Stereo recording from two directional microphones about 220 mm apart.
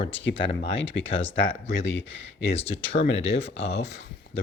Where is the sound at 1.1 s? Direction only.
25° left (ahead or behind).